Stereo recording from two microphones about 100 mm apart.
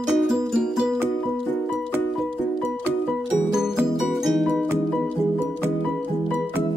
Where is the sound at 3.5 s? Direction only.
5° right (ahead or behind).